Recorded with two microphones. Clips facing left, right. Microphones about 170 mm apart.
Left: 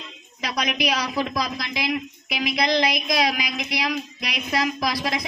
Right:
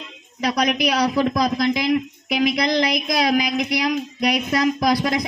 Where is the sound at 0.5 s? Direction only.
50° right (ahead or behind).